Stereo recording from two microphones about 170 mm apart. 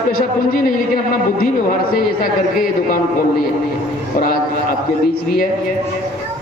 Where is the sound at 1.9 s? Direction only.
55° left (ahead or behind).